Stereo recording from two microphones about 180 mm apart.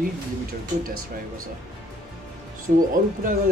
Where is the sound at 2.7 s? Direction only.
50° right (ahead or behind).